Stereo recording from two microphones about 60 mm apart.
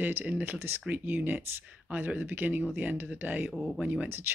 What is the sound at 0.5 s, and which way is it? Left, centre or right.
Speech, right.